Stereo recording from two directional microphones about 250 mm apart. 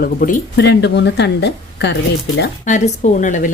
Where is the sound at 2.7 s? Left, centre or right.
Left.